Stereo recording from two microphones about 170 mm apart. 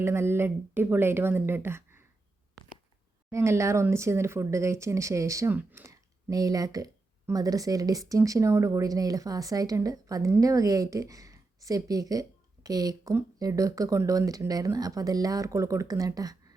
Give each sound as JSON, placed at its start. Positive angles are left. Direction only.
{"t": 0.0, "sound": "speech", "side_deg": -15}
{"t": 3.2, "sound": "speech", "side_deg": -15}